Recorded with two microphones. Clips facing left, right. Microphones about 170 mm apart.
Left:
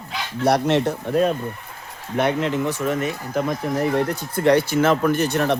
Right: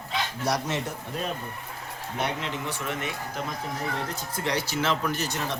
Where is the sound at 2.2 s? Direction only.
50° left (ahead or behind).